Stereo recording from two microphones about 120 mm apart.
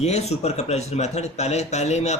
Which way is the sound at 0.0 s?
65° left (ahead or behind).